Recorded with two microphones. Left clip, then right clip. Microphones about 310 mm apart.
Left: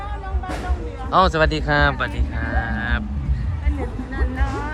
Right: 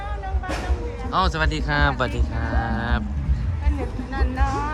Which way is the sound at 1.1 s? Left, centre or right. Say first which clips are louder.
Left 6 dB; centre.